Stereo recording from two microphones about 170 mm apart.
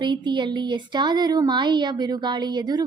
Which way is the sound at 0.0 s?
25° right (ahead or behind).